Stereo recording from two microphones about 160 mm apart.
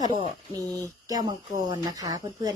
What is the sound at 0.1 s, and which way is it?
Speech, 30° right (ahead or behind).